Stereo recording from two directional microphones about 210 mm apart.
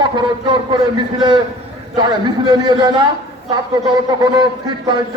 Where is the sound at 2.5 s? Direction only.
20° right (ahead or behind).